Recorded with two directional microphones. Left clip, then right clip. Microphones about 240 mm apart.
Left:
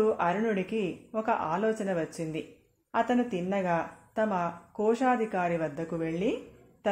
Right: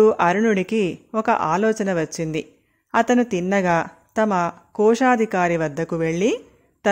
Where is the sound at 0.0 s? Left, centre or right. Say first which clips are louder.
Right 11 dB; right.